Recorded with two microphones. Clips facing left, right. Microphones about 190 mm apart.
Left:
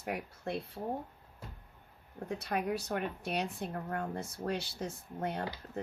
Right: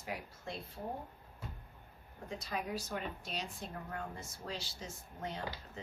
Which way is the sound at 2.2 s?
65° left (ahead or behind).